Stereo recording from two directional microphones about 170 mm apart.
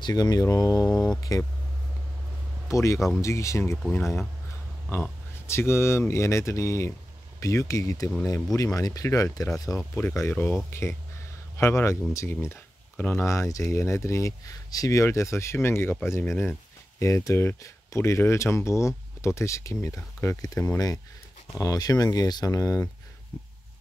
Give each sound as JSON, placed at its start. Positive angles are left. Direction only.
{"t": 0.0, "sound": "speech", "side_deg": 20}
{"t": 0.8, "sound": "speech", "side_deg": 5}
{"t": 2.7, "sound": "speech", "side_deg": 15}
{"t": 4.8, "sound": "speech", "side_deg": 10}